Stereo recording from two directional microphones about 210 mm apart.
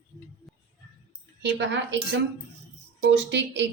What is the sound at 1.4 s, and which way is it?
Speech, 60° right (ahead or behind).